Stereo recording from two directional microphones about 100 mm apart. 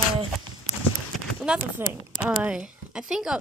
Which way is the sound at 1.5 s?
10° right (ahead or behind).